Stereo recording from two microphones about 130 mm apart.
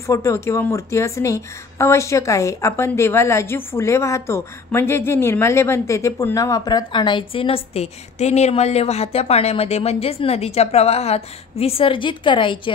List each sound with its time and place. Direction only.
0.0 s speech: 25° left (ahead or behind); by 12.7 s 40° left (ahead or behind)